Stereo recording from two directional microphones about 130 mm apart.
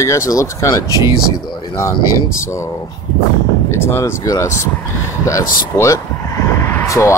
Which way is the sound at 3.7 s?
20° left (ahead or behind).